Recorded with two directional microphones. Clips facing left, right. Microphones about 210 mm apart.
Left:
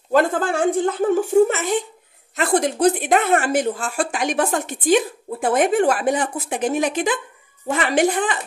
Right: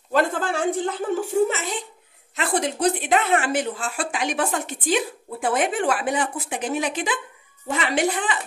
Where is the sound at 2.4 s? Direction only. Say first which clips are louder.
Left 5 dB; 45° left (ahead or behind).